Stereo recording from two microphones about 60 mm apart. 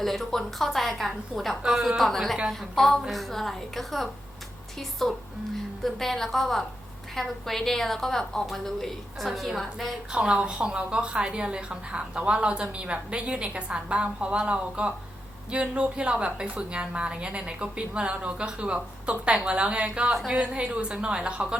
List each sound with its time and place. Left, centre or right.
0.0 s a woman's voice: centre
10.1 s a woman's voice: centre